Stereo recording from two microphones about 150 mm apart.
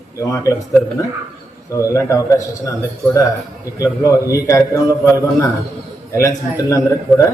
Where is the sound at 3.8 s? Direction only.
20° left (ahead or behind).